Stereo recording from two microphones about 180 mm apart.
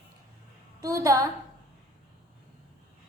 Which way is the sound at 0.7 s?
20° right (ahead or behind).